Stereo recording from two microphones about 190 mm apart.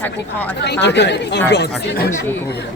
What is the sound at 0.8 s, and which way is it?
Speech, 65° left (ahead or behind).